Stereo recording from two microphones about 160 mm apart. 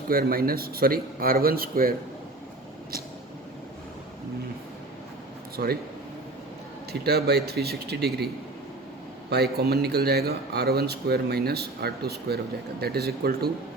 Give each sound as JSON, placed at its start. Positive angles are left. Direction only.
{"t": 0.1, "sound": "speech", "side_deg": -70}
{"t": 5.6, "sound": "speech", "side_deg": -70}
{"t": 7.0, "sound": "speech", "side_deg": -85}
{"t": 9.3, "sound": "speech", "side_deg": -80}